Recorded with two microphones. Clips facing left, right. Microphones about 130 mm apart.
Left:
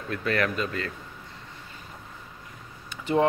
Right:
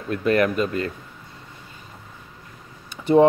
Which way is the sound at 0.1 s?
20° right (ahead or behind).